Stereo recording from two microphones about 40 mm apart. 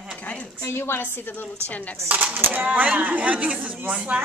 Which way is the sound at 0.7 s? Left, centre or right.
Left.